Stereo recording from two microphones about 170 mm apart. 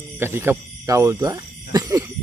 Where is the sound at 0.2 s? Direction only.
15° right (ahead or behind).